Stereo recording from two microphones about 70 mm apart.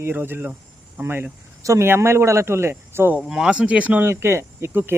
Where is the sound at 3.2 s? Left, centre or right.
Centre.